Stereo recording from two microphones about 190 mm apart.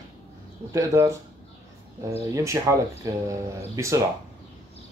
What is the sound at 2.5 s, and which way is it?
Speech, 15° right (ahead or behind).